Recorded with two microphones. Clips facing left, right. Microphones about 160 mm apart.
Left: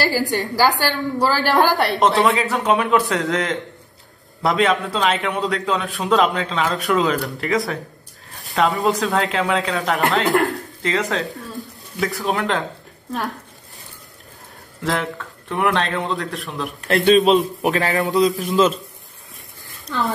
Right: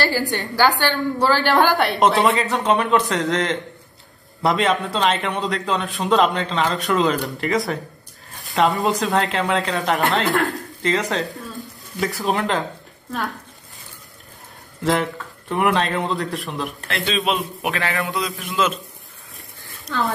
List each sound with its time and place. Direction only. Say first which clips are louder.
0.3 s a man's voice: left 1 dB; centre (ahead or behind)
14.8 s a man's voice: right 2 dB; centre (ahead or behind)
16.8 s a man's voice: left 10 dB; 45° left (ahead or behind)